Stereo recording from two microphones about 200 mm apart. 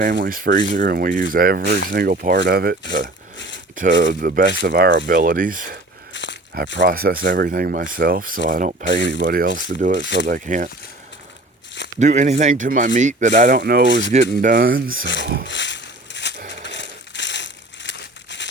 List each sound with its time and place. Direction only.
0.0 s speech: 45° right (ahead or behind)
3.3 s a sound: 65° left (ahead or behind)
3.8 s speech: 40° right (ahead or behind)
4.6 s speech: 55° right (ahead or behind)
6.1 s a sound: 65° left (ahead or behind)
6.8 s speech: 45° right (ahead or behind)
8.8 s speech: 65° left (ahead or behind)
9.2 s speech: 45° right (ahead or behind)
10.0 s speech: 65° left (ahead or behind)
10.3 s speech: 40° right (ahead or behind)
11.9 s speech: 35° right (ahead or behind)
14.1 s speech: 35° right (ahead or behind)
15.4 s a sound: 65° left (ahead or behind)
16.6 s crumpling: 65° left (ahead or behind)